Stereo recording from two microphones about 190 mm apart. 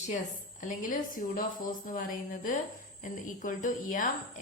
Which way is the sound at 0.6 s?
45° left (ahead or behind).